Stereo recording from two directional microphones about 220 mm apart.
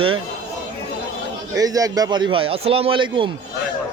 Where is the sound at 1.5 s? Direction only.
15° right (ahead or behind).